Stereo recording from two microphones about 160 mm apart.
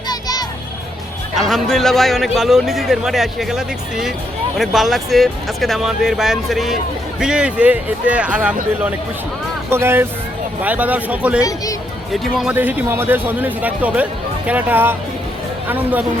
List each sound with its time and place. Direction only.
0.1 s music: 25° left (ahead or behind)
1.4 s a man's voice: centre (ahead or behind)
9.7 s a man's voice: 15° right (ahead or behind)